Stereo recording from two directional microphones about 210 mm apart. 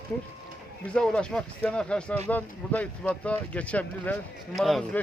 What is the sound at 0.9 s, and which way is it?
Speech, 5° left (ahead or behind).